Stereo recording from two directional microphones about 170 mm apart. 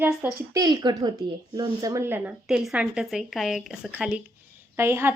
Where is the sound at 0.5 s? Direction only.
25° right (ahead or behind).